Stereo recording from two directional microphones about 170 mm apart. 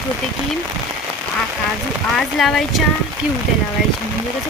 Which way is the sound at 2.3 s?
Centre (ahead or behind).